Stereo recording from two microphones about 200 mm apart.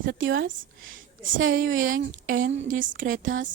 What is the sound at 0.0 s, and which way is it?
Speech, 70° right (ahead or behind).